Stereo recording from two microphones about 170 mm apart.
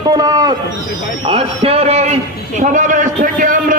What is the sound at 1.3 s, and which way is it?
A man's voice, 35° right (ahead or behind).